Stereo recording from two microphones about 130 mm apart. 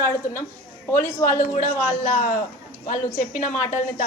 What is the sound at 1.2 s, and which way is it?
A man's voice, 90° left.